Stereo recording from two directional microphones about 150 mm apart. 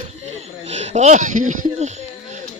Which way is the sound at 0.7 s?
50° right (ahead or behind).